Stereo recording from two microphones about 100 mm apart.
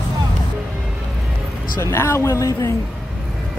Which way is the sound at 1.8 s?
25° left (ahead or behind).